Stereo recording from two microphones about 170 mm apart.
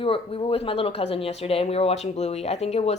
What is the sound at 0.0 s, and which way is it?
Speech, 35° left (ahead or behind).